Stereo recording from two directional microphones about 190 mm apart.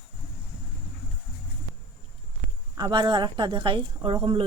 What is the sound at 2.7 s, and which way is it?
Speech, 25° right (ahead or behind).